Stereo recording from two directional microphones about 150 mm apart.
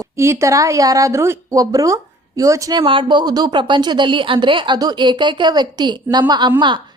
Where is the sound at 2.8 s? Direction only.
35° right (ahead or behind).